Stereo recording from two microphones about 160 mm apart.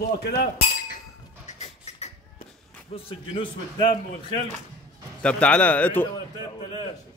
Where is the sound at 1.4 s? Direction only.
45° left (ahead or behind).